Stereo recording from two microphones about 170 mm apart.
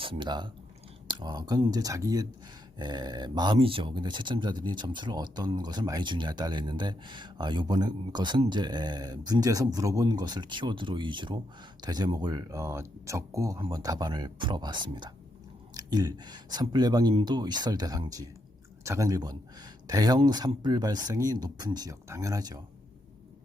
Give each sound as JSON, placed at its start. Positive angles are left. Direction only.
{"t": 0.0, "sound": "speech", "side_deg": -30}